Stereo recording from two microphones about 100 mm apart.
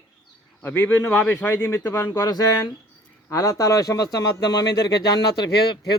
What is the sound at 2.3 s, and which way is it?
Speech, 35° left (ahead or behind).